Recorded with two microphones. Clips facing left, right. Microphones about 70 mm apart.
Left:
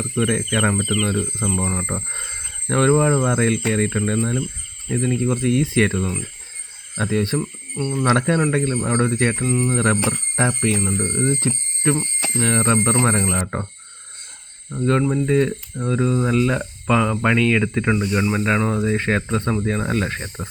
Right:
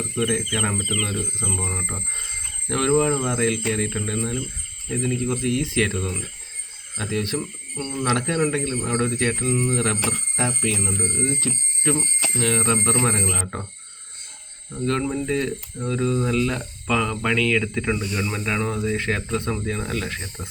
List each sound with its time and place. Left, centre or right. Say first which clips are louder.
0.2 s speech: left 4 dB; left
7.3 s speech: left 4 dB; centre
8.0 s speech: left 5 dB; left
8.4 s speech: left 3 dB; left
14.7 s speech: left 5 dB; left